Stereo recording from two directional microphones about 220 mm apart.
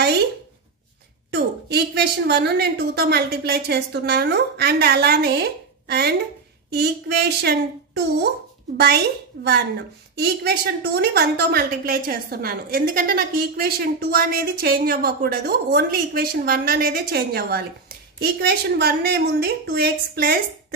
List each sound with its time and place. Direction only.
1.3 s a woman's voice: 50° right (ahead or behind)